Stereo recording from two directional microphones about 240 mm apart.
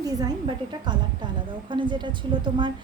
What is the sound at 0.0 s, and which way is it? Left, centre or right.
A woman's voice, centre.